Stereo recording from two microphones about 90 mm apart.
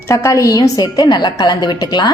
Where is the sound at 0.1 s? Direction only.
35° left (ahead or behind).